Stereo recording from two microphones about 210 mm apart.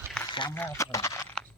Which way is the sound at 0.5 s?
10° left (ahead or behind).